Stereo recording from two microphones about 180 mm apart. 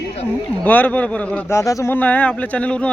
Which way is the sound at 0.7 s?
10° left (ahead or behind).